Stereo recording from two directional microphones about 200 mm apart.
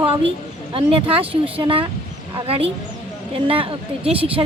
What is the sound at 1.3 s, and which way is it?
A woman's voice, 25° right (ahead or behind).